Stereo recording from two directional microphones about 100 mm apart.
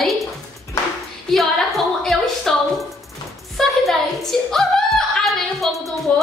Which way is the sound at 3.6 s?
Centre (ahead or behind).